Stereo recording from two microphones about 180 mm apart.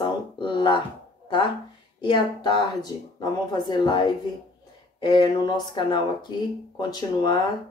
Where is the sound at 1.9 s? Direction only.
25° left (ahead or behind).